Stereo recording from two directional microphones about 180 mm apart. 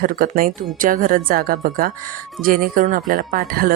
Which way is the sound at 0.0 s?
55° right (ahead or behind).